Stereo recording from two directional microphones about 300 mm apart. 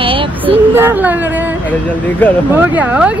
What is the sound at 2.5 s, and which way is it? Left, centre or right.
Speech, centre.